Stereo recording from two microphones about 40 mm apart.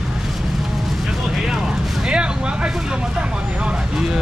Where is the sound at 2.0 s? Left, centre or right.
Right.